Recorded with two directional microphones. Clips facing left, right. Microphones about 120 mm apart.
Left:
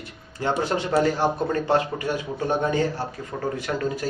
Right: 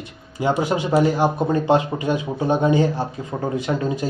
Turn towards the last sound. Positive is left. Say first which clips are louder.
# right 4 dB
turn(degrees=-20)  # may be behind; listen again after turning